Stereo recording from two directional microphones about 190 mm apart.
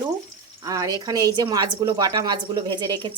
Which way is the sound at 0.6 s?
20° right (ahead or behind).